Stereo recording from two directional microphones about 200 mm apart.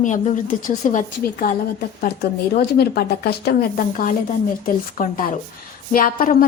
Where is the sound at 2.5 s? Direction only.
50° left (ahead or behind).